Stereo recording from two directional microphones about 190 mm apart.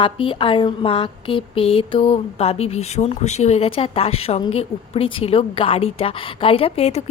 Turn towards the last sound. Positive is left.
turn(degrees=30)  # may be behind; listen again after turning